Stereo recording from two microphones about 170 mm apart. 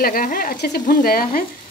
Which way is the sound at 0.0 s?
55° left (ahead or behind).